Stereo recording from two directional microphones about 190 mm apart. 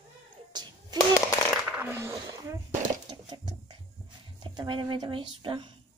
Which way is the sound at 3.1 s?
20° right (ahead or behind).